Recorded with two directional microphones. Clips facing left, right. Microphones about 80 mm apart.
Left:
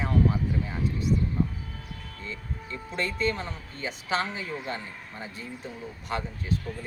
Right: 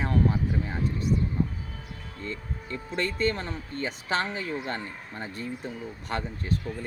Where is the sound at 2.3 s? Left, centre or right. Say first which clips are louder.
Right 2 dB; right.